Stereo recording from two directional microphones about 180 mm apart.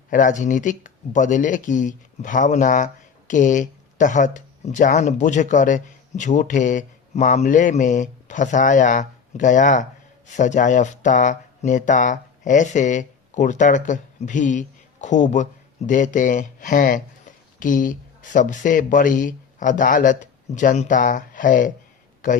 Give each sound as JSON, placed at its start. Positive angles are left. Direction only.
{"t": 0.1, "sound": "speech", "side_deg": 45}